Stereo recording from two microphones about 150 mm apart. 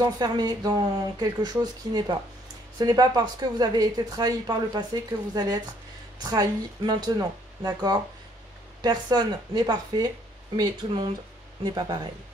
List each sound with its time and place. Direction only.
0.0 s speech: 30° right (ahead or behind)